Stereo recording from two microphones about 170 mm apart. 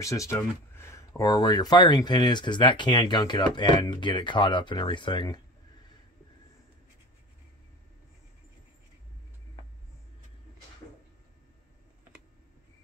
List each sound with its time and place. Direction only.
0.0 s speech: 20° left (ahead or behind)